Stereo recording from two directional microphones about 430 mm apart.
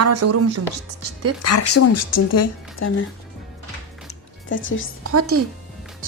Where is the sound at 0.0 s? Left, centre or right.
Right.